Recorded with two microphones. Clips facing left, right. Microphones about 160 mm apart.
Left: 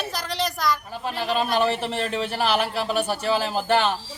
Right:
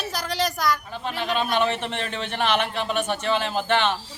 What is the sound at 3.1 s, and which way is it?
Speech, 35° left (ahead or behind).